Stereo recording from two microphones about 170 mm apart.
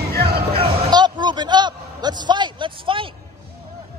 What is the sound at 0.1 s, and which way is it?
Music, 70° right (ahead or behind).